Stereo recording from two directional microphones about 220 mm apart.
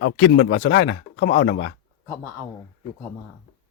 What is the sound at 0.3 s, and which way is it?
Speech, 60° left (ahead or behind).